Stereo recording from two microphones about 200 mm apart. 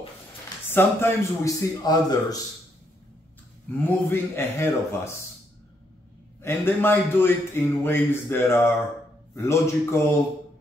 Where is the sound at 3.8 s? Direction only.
10° left (ahead or behind).